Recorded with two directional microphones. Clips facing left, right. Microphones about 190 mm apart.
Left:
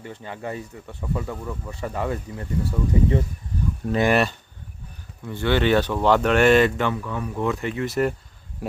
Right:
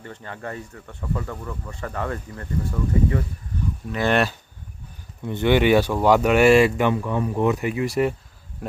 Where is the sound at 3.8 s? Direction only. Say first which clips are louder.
Left 6 dB; 55° left (ahead or behind).